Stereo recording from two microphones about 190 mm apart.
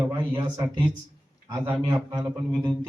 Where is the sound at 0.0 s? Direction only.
10° right (ahead or behind).